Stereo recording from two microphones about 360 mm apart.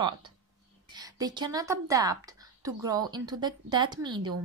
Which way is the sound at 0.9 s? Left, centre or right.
Centre.